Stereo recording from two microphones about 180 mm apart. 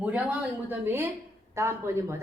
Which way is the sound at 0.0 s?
5° right (ahead or behind).